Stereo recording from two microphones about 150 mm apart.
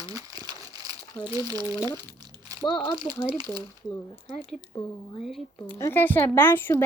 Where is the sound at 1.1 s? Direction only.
30° left (ahead or behind).